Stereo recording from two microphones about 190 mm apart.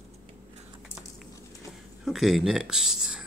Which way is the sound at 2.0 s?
Centre (ahead or behind).